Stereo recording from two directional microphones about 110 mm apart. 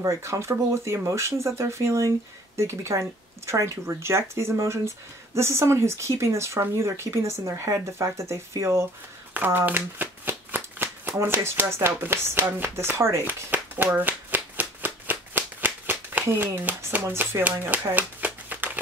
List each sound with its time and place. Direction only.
0.0 s speech: 25° right (ahead or behind)
9.3 s shuffling cards: 20° right (ahead or behind)
17.0 s speech: 25° right (ahead or behind)